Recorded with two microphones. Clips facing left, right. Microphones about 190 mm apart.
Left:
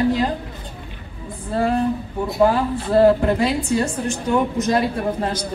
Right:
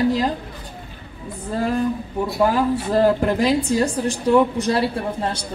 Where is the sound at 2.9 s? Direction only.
40° right (ahead or behind).